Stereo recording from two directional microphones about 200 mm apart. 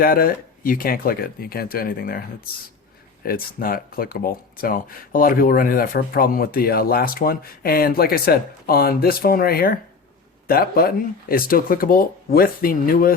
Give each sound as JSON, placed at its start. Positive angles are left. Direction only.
{"t": 0.0, "sound": "speech", "side_deg": 45}
{"t": 3.2, "sound": "speech", "side_deg": 45}